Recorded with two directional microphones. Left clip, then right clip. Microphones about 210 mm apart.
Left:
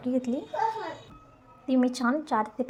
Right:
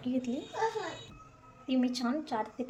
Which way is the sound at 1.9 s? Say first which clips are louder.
Left 7 dB; 20° left (ahead or behind).